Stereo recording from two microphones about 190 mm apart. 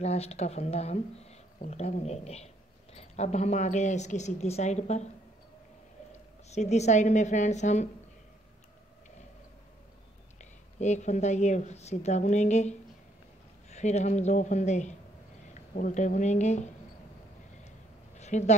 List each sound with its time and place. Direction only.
0.0 s a woman's voice: 35° left (ahead or behind)
6.5 s a woman's voice: 35° left (ahead or behind)
10.4 s a woman's voice: 40° left (ahead or behind)
18.2 s speech: 35° left (ahead or behind)